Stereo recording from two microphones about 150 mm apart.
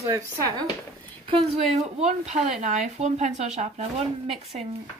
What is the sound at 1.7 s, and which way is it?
Speech, 45° right (ahead or behind).